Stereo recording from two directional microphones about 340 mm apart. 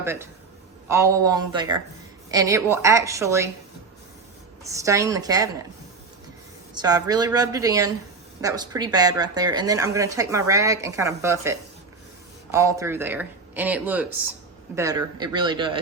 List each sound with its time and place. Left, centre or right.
0.0 s a man's voice: centre
4.7 s a woman's voice: centre
6.7 s a woman's voice: centre